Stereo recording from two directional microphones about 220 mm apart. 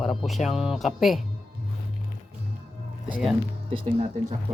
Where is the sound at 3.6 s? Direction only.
25° right (ahead or behind).